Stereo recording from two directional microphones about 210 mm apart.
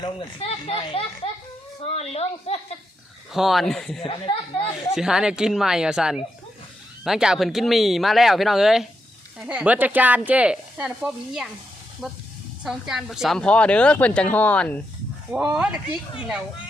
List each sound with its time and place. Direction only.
0.0 s a child's voice: 25° left (ahead or behind)
3.3 s speech: centre (ahead or behind)
4.0 s a child's voice: 25° left (ahead or behind)
4.9 s speech: centre (ahead or behind)
15.3 s speech: 5° right (ahead or behind)